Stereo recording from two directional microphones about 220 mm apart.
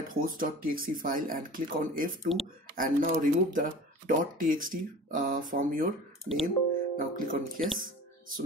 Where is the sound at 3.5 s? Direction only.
35° right (ahead or behind).